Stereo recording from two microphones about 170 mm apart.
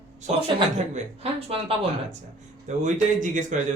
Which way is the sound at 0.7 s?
40° right (ahead or behind).